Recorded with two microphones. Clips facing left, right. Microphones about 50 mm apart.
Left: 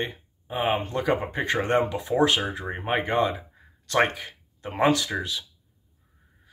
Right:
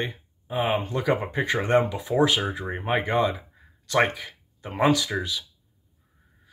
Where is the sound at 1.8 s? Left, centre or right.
Left.